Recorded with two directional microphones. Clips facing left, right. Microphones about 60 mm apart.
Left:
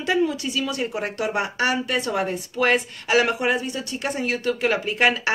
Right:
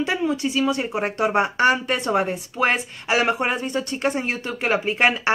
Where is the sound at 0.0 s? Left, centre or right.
Right.